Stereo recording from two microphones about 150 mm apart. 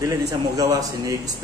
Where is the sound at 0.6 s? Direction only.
25° right (ahead or behind).